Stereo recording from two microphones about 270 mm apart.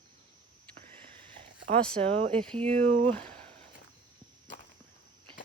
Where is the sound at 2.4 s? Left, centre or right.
Centre.